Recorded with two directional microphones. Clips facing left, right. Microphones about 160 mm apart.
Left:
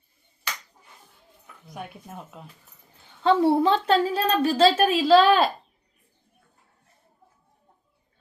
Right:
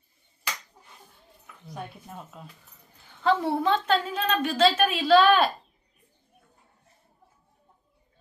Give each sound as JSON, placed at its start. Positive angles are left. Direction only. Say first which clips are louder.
{"t": 1.7, "sound": "speech", "louder": "left 1 dB", "side_deg": 15}
{"t": 3.2, "sound": "a woman's voice", "louder": "left 4 dB", "side_deg": 30}